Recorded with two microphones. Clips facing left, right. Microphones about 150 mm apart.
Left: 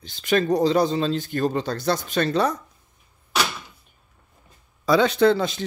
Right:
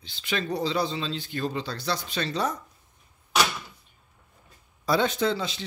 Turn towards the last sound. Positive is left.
turn(degrees=55)  # may be behind; listen again after turning